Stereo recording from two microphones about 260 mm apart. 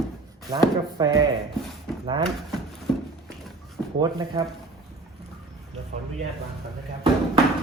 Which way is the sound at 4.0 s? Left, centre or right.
Centre.